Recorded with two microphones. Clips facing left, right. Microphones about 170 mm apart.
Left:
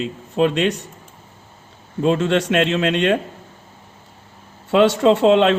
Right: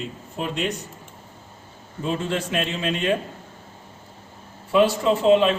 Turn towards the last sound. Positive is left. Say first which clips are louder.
# left 4 dB
turn(degrees=75)  # may be behind; listen again after turning